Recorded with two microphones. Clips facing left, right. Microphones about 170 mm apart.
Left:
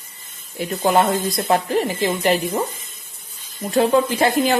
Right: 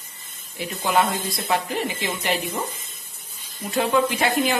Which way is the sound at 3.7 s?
35° left (ahead or behind).